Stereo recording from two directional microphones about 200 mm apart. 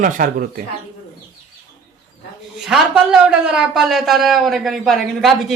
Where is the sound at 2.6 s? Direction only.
Centre (ahead or behind).